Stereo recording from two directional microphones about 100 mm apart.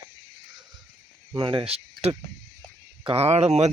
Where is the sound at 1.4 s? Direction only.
50° right (ahead or behind).